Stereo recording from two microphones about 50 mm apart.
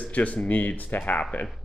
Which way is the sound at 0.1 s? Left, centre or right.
Left.